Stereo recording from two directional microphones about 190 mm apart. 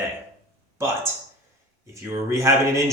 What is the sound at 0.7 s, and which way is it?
Speech, 15° right (ahead or behind).